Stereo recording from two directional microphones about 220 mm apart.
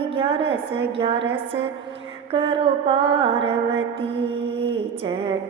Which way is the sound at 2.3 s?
25° right (ahead or behind).